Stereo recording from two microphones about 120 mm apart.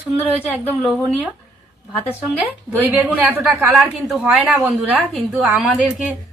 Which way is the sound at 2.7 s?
15° right (ahead or behind).